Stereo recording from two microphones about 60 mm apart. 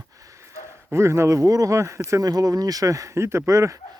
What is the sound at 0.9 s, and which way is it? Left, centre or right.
Speech, right.